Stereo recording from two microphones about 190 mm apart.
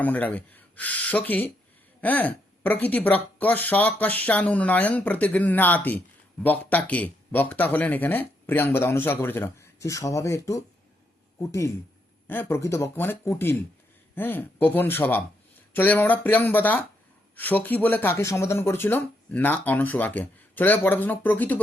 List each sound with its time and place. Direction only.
0.0 s speech: 10° left (ahead or behind)